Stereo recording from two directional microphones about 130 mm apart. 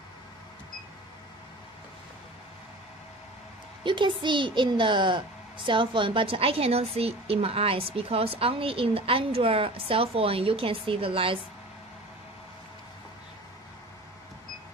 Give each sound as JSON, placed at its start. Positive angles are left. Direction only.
{"t": 3.8, "sound": "speech", "side_deg": -40}